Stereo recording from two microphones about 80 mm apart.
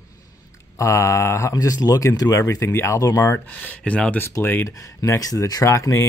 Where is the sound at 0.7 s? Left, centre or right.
Left.